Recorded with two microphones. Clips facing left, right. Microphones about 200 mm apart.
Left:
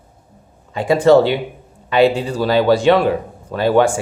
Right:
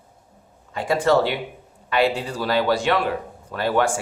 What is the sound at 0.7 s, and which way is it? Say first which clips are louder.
Speech: left 8 dB; 20° left (ahead or behind).